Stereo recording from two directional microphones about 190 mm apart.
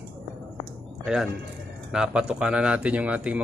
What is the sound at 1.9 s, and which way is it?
Speech, 5° right (ahead or behind).